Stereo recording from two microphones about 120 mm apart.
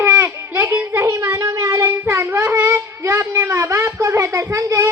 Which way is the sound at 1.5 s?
30° right (ahead or behind).